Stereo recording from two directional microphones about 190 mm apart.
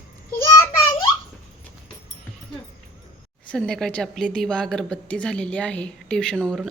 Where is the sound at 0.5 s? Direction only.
20° left (ahead or behind).